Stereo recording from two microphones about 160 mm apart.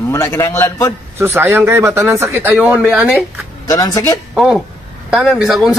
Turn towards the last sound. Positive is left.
turn(degrees=0)  # may be behind; listen again after turning